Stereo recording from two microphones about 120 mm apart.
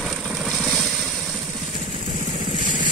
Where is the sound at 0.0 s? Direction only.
5° right (ahead or behind).